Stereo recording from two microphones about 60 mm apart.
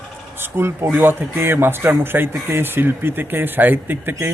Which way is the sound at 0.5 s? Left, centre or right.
Right.